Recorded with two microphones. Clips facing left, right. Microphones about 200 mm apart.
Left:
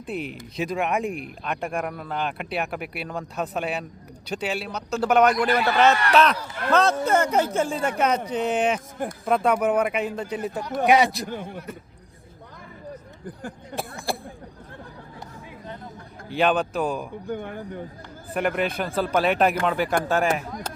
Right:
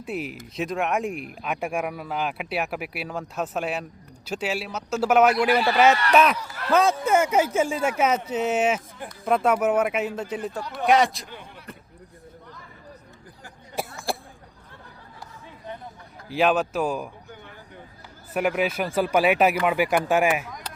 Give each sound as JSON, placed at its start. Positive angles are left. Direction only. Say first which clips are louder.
{"t": 0.0, "sound": "speech", "louder": "even", "side_deg": -5}
{"t": 11.3, "sound": "speech", "louder": "left 10 dB", "side_deg": 45}
{"t": 13.7, "sound": "a sound", "louder": "right 1 dB", "side_deg": 60}
{"t": 16.3, "sound": "speech", "louder": "even", "side_deg": 0}
{"t": 17.2, "sound": "speech", "louder": "left 13 dB", "side_deg": 55}
{"t": 18.3, "sound": "speech", "louder": "right 1 dB", "side_deg": -5}
{"t": 20.5, "sound": "speech", "louder": "left 5 dB", "side_deg": 35}